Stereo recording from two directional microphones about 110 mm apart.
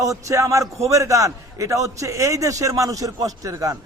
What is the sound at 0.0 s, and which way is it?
A man's voice, 30° right (ahead or behind).